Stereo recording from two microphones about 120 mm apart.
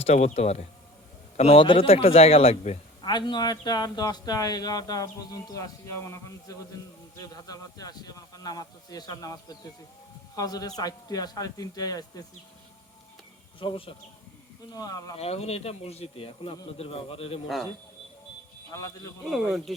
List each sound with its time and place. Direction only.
0.0 s speech: 65° left (ahead or behind)
1.4 s speech: 55° left (ahead or behind)
3.0 s speech: 35° left (ahead or behind)
13.6 s speech: 45° left (ahead or behind)
14.7 s speech: 30° left (ahead or behind)
15.2 s speech: 60° left (ahead or behind)
18.7 s a man's voice: 25° left (ahead or behind)
19.2 s speech: centre (ahead or behind)